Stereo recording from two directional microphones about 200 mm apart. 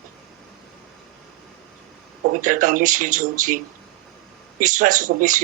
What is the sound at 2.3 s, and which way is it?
Speech, 40° right (ahead or behind).